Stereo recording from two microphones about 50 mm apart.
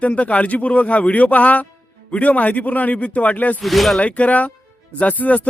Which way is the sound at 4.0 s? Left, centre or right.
Left.